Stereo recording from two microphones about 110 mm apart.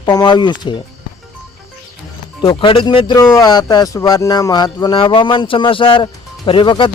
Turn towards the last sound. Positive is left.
turn(degrees=50)  # may be behind; listen again after turning